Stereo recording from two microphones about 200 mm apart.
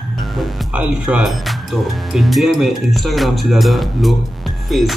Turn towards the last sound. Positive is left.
turn(degrees=0)  # may be behind; listen again after turning